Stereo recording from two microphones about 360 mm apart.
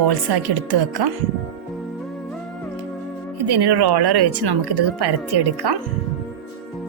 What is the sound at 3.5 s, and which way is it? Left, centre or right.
Speech, right.